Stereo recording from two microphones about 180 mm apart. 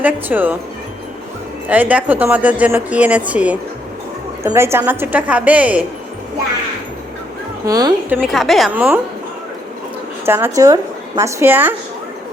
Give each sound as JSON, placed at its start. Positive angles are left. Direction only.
{"t": 0.0, "sound": "speech", "side_deg": -10}
{"t": 1.6, "sound": "speech", "side_deg": -10}
{"t": 7.6, "sound": "a woman's voice", "side_deg": -20}
{"t": 8.2, "sound": "a woman's voice", "side_deg": 0}
{"t": 10.2, "sound": "speech", "side_deg": -15}